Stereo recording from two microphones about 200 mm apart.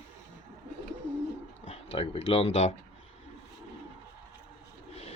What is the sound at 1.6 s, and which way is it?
Speech, 30° left (ahead or behind).